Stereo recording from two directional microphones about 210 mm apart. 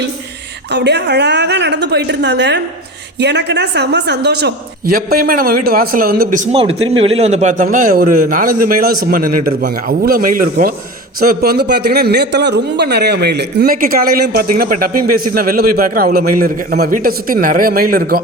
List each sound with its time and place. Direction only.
0.7 s a man's voice: 55° right (ahead or behind)